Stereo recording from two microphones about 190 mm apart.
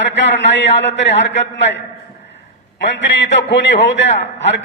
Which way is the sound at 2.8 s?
70° left (ahead or behind).